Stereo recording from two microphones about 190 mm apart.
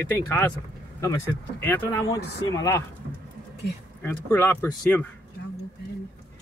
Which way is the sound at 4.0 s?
10° left (ahead or behind).